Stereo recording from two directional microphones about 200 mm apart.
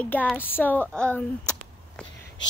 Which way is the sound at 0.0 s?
5° left (ahead or behind).